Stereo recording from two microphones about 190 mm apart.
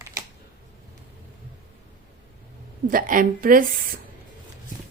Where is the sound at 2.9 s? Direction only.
45° right (ahead or behind).